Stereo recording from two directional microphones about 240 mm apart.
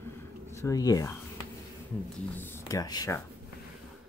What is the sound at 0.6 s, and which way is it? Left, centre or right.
Speech, centre.